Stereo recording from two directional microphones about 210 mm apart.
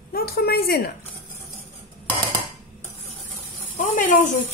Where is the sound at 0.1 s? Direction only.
45° left (ahead or behind).